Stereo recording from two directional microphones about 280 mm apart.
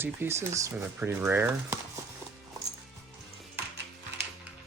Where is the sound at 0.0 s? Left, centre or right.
Centre.